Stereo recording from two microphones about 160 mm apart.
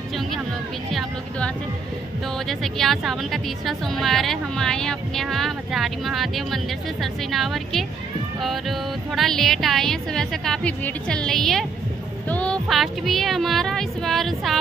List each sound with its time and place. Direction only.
2.4 s speech: centre (ahead or behind)